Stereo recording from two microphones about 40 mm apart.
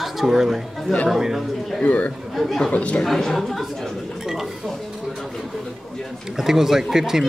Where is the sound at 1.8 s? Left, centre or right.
Left.